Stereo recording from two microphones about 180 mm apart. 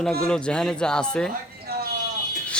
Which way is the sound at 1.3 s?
55° right (ahead or behind).